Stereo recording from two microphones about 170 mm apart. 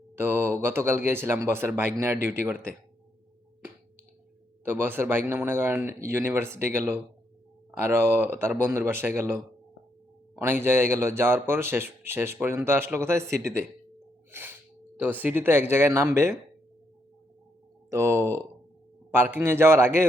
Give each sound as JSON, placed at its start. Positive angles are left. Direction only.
{"t": 0.2, "sound": "speech", "side_deg": -15}
{"t": 4.6, "sound": "speech", "side_deg": -10}
{"t": 14.3, "sound": "sneeze", "side_deg": -10}
{"t": 14.9, "sound": "speech", "side_deg": -10}
{"t": 17.9, "sound": "speech", "side_deg": -15}